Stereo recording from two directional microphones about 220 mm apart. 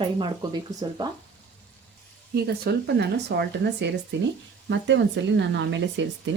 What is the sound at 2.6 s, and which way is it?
Speech, 50° right (ahead or behind).